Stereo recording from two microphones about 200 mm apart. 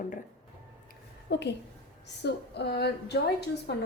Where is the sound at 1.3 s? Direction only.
60° left (ahead or behind).